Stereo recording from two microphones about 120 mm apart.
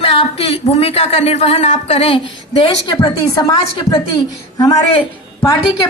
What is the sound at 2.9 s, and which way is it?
Speech, 30° left (ahead or behind).